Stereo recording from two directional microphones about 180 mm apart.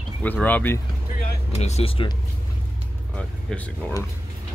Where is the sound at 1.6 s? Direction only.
35° left (ahead or behind).